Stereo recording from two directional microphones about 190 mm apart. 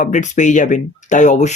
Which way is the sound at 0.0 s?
40° left (ahead or behind).